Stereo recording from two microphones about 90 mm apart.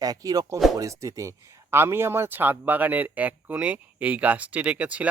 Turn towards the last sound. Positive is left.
turn(degrees=-15)  # may be behind; listen again after turning